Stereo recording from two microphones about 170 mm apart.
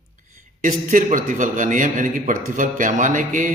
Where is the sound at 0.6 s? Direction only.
50° right (ahead or behind).